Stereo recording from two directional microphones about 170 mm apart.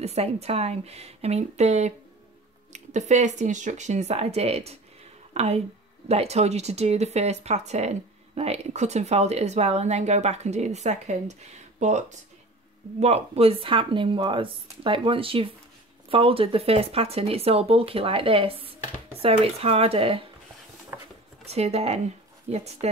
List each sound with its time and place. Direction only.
0.0 s speech: 40° right (ahead or behind)
20.9 s a sound: 15° right (ahead or behind)
21.5 s speech: 40° right (ahead or behind)